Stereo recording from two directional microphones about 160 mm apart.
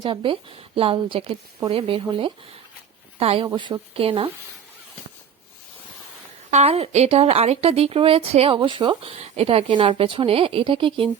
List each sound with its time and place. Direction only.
0.0 s speech: 30° right (ahead or behind)
6.5 s speech: 40° right (ahead or behind)